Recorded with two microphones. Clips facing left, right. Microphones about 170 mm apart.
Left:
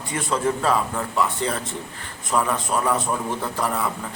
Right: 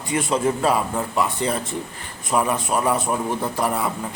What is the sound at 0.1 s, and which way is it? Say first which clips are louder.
A man's voice: right 3 dB; 15° right (ahead or behind).